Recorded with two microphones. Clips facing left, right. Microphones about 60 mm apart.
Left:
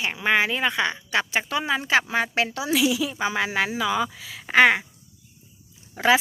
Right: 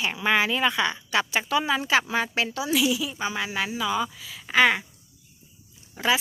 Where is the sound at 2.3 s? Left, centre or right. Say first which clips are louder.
Left 2 dB; left.